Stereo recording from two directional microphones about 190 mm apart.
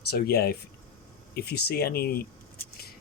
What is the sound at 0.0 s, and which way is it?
Speech, 55° left (ahead or behind).